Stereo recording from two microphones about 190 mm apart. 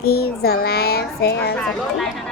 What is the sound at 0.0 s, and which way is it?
Child singing, 55° left (ahead or behind).